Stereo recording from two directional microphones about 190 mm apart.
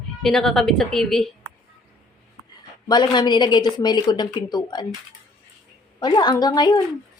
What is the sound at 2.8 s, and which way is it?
A woman's voice, 25° left (ahead or behind).